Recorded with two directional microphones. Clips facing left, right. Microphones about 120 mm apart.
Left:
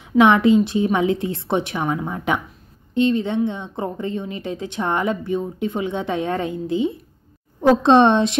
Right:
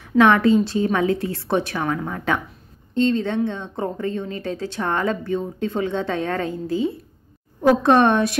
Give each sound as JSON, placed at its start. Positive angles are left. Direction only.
{"t": 0.2, "sound": "speech", "side_deg": 15}